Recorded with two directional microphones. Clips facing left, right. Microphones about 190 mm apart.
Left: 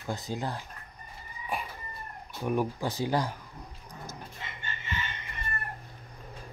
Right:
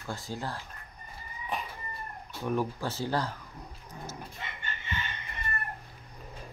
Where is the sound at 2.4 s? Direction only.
15° left (ahead or behind).